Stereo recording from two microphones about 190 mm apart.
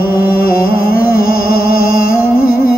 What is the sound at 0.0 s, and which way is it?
Music, 50° left (ahead or behind).